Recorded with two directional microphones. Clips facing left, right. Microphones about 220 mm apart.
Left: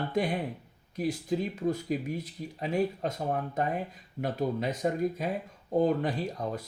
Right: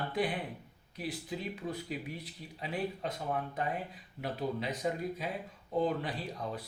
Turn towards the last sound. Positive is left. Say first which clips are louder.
# left 6 dB
turn(degrees=45)  # may be behind; listen again after turning